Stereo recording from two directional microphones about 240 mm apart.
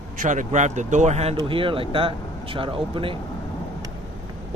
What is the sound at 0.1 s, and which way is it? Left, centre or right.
Speech, right.